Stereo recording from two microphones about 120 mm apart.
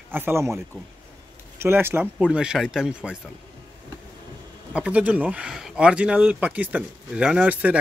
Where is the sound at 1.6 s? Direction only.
20° right (ahead or behind).